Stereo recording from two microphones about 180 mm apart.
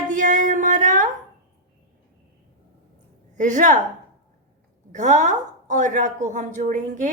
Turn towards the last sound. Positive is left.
turn(degrees=-45)  # may be behind; listen again after turning